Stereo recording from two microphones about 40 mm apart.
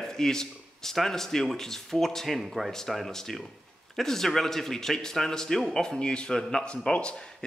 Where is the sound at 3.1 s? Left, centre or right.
Centre.